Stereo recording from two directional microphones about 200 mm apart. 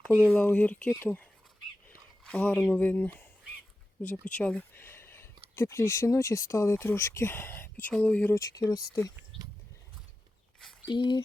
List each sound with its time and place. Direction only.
0.2 s speech: 5° left (ahead or behind)
4.3 s speech: 5° left (ahead or behind)
9.3 s a sound: 25° right (ahead or behind)
10.9 s speech: 25° left (ahead or behind)